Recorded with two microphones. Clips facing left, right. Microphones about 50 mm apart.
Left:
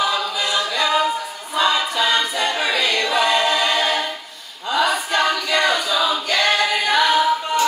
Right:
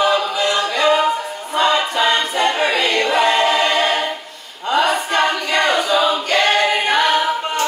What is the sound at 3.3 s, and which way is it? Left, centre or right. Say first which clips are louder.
Choir: right 3 dB; right.